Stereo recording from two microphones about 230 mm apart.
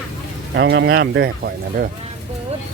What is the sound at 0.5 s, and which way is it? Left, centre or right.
Speech, right.